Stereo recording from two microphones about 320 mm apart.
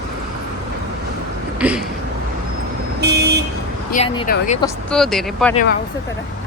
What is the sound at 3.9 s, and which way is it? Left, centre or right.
Speech, centre.